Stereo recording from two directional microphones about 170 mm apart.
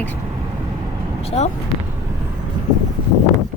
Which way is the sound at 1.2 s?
40° left (ahead or behind).